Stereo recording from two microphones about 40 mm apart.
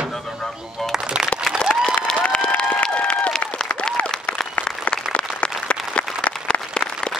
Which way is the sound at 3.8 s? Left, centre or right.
Left.